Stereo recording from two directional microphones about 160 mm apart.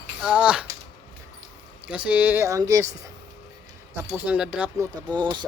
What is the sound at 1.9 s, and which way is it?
Speech, 10° right (ahead or behind).